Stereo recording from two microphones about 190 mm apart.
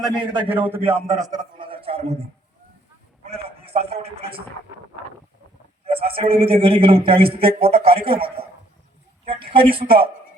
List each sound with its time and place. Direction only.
0.0 s a man's voice: 25° right (ahead or behind)
3.2 s a man's voice: 30° right (ahead or behind)
5.8 s a man's voice: 30° right (ahead or behind)